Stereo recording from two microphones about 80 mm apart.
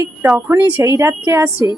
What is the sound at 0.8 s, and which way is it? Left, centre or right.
Speech, right.